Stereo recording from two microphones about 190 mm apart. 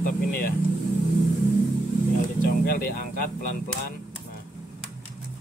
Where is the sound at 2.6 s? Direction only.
50° left (ahead or behind).